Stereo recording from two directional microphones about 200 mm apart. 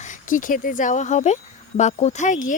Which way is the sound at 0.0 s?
40° left (ahead or behind).